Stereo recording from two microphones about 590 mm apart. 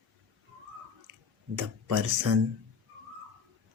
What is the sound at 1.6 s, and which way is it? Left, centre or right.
Speech, right.